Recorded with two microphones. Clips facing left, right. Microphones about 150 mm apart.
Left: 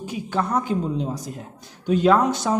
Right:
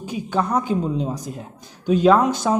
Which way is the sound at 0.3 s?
15° right (ahead or behind).